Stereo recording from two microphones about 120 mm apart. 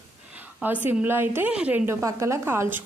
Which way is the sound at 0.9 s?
20° right (ahead or behind).